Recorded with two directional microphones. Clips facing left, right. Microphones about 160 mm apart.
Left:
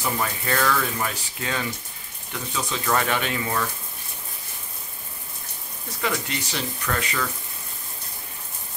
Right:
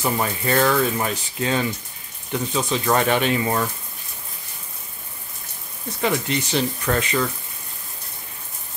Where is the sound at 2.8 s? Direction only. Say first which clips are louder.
Right 4 dB; 25° right (ahead or behind).